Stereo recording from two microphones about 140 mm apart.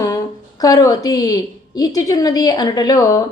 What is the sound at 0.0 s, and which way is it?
A woman's voice, 25° left (ahead or behind).